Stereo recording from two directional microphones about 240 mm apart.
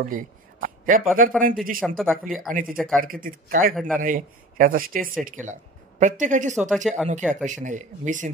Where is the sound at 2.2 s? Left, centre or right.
Right.